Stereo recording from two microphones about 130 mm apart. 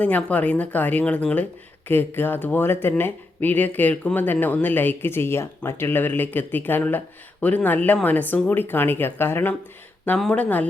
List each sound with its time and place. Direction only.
0.0 s speech: 10° left (ahead or behind)